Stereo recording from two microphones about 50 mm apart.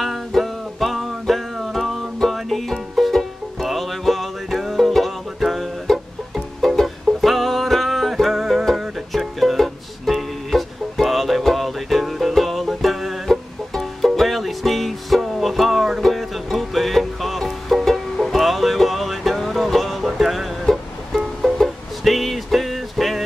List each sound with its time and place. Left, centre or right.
0.0 s music: centre